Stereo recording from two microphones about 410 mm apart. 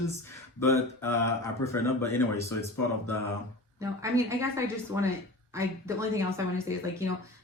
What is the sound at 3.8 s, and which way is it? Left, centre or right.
A woman's voice, centre.